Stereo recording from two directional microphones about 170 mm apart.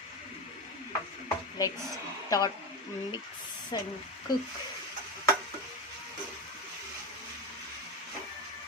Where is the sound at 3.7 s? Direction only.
25° left (ahead or behind).